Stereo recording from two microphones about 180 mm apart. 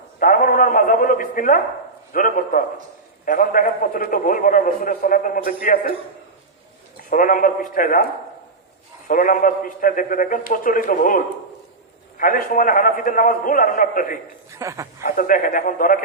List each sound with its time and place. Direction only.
0.2 s a man's voice: 50° left (ahead or behind)
6.9 s a man's voice: 50° left (ahead or behind)
9.0 s a man's voice: 50° left (ahead or behind)
14.5 s speech: 15° right (ahead or behind)
15.0 s a man's voice: 50° left (ahead or behind)